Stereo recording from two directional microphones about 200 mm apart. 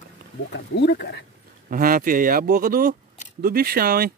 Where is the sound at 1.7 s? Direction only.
45° right (ahead or behind).